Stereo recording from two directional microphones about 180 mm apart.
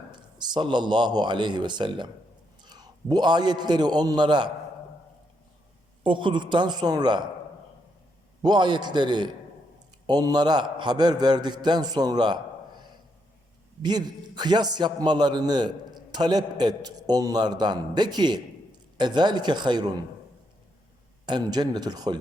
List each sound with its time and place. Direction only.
0.3 s a man's voice: 25° right (ahead or behind)
6.0 s a man's voice: 25° right (ahead or behind)
8.4 s a man's voice: 25° right (ahead or behind)
13.8 s a man's voice: 25° right (ahead or behind)
21.2 s a man's voice: 25° right (ahead or behind)